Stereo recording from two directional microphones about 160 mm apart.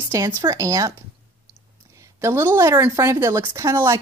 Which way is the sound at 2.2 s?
15° right (ahead or behind).